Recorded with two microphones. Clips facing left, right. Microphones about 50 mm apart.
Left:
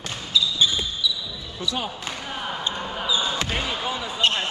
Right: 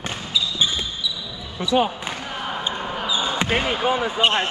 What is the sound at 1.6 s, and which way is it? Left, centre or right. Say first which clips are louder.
Speech: right 9 dB; right.